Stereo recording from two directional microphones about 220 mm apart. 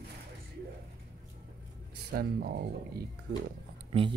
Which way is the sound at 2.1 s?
45° right (ahead or behind).